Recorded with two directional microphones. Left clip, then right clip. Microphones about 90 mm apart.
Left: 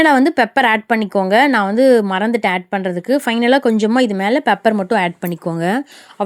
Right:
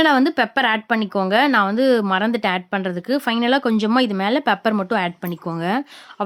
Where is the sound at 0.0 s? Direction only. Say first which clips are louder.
Left 4 dB; 35° left (ahead or behind).